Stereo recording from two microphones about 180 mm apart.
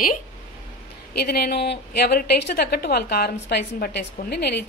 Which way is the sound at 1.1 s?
60° left (ahead or behind).